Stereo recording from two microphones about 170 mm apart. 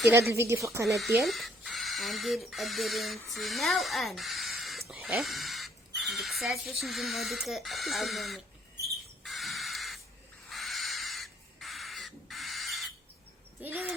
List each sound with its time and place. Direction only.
0.1 s speech: 15° right (ahead or behind)
0.9 s speech: centre (ahead or behind)
9.2 s crow: centre (ahead or behind)
13.6 s speech: 10° right (ahead or behind)